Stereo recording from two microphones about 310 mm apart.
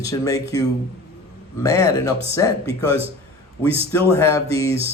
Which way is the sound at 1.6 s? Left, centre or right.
Centre.